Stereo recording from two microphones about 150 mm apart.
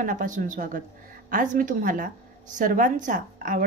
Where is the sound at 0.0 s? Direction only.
60° right (ahead or behind).